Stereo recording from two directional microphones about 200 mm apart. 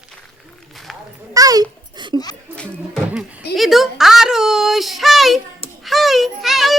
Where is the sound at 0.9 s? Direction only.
Centre (ahead or behind).